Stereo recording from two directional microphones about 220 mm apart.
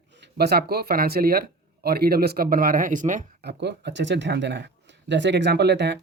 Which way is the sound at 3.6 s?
50° right (ahead or behind).